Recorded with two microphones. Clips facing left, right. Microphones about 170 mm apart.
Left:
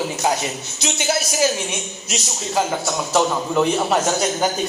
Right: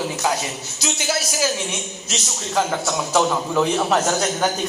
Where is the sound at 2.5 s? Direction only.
5° left (ahead or behind).